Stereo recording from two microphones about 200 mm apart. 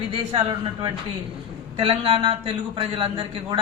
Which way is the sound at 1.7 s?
30° right (ahead or behind).